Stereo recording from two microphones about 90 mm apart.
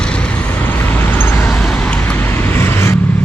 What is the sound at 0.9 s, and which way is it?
Vehicle, 25° left (ahead or behind).